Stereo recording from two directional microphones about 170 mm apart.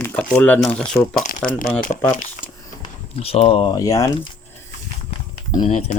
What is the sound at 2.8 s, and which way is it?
Speech, 35° left (ahead or behind).